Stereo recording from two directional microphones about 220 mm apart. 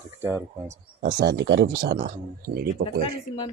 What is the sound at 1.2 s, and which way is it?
Speech, 55° right (ahead or behind).